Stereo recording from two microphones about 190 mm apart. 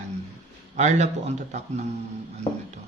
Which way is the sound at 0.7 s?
40° right (ahead or behind).